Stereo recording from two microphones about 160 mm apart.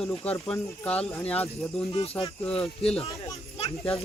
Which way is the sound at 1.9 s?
35° left (ahead or behind).